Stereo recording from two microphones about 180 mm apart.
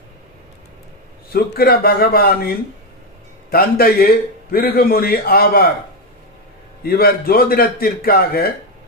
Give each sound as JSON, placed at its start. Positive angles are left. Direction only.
{"t": 1.3, "sound": "a man's voice", "side_deg": 55}
{"t": 6.8, "sound": "a man's voice", "side_deg": 55}